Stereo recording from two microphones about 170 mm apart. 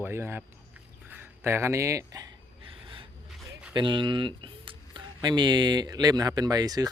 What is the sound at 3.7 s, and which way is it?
Speech, 30° right (ahead or behind).